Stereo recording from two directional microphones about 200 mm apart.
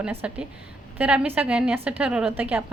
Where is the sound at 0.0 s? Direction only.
5° right (ahead or behind).